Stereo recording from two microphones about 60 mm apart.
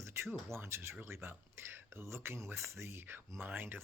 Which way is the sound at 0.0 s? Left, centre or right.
Right.